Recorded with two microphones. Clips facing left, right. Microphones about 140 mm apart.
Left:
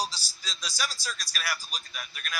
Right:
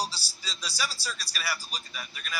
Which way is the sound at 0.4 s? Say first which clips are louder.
Even; 10° right (ahead or behind).